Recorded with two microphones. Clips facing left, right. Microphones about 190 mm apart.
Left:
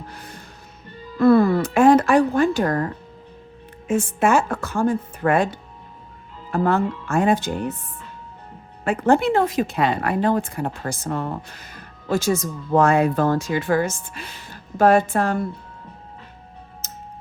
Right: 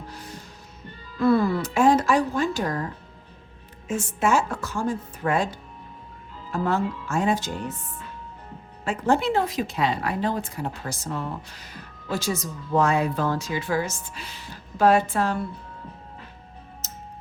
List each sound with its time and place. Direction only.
0.1 s music: 55° left (ahead or behind)
1.2 s speech: 55° left (ahead or behind)
8.8 s speech: 55° left (ahead or behind)
16.8 s music: 60° left (ahead or behind)